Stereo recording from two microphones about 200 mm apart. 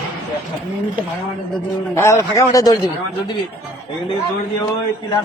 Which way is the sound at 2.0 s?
15° left (ahead or behind).